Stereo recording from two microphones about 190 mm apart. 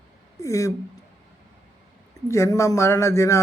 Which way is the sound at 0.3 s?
15° left (ahead or behind).